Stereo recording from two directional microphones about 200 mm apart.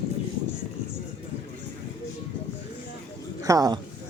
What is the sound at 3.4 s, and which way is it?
Speech, 20° right (ahead or behind).